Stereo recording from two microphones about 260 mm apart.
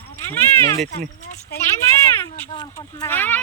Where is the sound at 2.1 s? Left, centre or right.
Centre.